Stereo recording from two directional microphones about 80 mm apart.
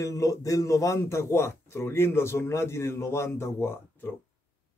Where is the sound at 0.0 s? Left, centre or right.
Left.